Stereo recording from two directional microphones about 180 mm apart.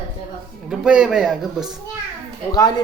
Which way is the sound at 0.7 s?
5° right (ahead or behind).